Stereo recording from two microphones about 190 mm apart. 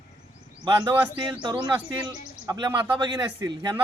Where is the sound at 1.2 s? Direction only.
25° right (ahead or behind).